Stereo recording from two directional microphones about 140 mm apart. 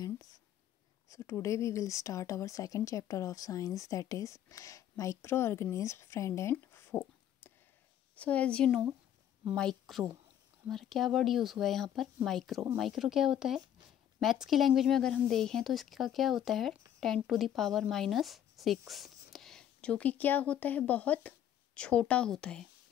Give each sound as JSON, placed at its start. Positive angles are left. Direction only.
{"t": 1.1, "sound": "speech", "side_deg": 20}
{"t": 6.5, "sound": "a sound", "side_deg": 15}
{"t": 8.2, "sound": "speech", "side_deg": 10}